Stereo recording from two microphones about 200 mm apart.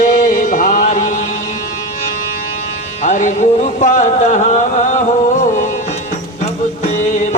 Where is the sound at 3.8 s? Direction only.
40° left (ahead or behind).